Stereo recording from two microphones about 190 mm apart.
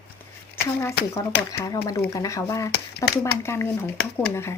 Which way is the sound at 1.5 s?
15° left (ahead or behind).